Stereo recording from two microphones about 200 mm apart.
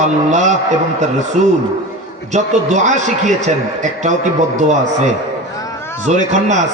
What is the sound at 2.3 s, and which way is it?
A man's voice, 35° right (ahead or behind).